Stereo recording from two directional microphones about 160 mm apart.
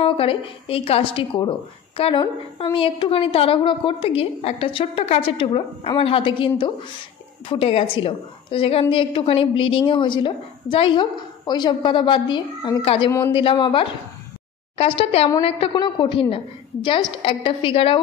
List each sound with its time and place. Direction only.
0.0 s a woman's voice: 35° left (ahead or behind)